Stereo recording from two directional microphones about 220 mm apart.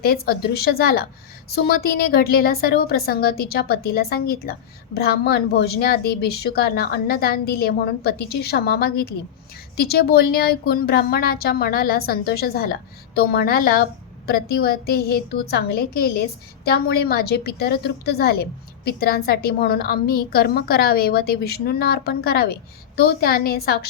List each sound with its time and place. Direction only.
0.0 s a woman's voice: 45° left (ahead or behind)